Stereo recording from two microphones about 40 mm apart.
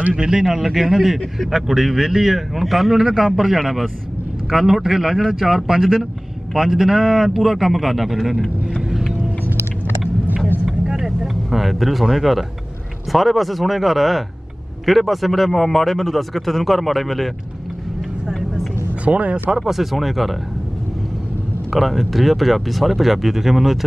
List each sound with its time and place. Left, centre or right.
0.2 s speech: centre
0.5 s speech: centre
3.5 s a man's voice: centre
10.6 s vehicle: centre
13.1 s a man's voice: centre
19.0 s speech: right
19.5 s a man's voice: centre
21.7 s a man's voice: centre